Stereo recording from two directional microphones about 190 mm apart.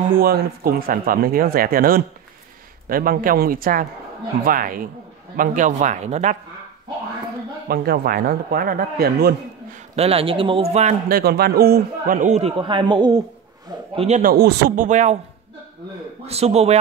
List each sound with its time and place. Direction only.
0.2 s speech: 50° right (ahead or behind)
7.6 s speech: 55° right (ahead or behind)
9.9 s speech: 30° right (ahead or behind)
14.3 s a man's voice: 55° right (ahead or behind)
14.9 s speech: 40° right (ahead or behind)
16.3 s speech: 35° right (ahead or behind)